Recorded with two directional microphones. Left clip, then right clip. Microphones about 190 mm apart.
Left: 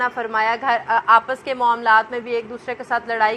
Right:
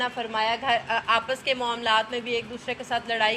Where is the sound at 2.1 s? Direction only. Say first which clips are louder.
Left 4 dB; 50° left (ahead or behind).